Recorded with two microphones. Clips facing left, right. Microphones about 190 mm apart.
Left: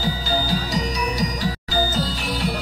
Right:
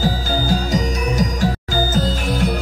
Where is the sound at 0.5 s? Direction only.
50° right (ahead or behind).